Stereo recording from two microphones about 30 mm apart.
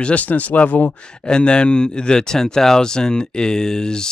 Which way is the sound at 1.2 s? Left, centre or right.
Left.